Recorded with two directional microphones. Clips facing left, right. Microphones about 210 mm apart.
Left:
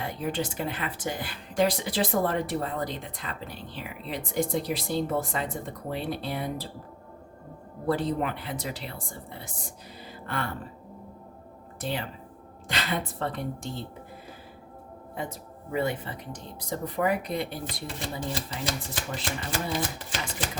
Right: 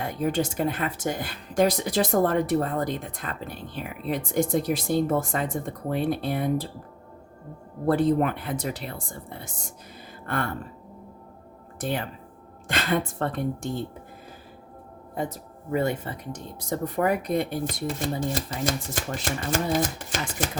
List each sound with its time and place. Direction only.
0.0 s speech: 45° right (ahead or behind)
7.9 s speech: 50° right (ahead or behind)
10.2 s speech: 50° right (ahead or behind)
11.8 s speech: 50° right (ahead or behind)
15.1 s speech: 45° right (ahead or behind)